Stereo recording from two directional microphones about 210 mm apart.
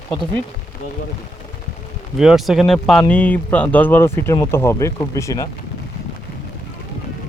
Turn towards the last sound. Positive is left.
turn(degrees=15)  # may be behind; listen again after turning